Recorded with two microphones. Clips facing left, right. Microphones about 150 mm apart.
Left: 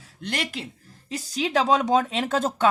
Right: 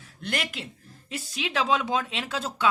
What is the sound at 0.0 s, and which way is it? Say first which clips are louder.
Speech: left 1 dB; 35° left (ahead or behind).